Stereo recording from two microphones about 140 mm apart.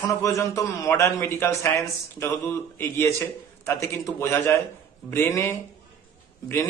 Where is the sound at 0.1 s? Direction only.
20° left (ahead or behind).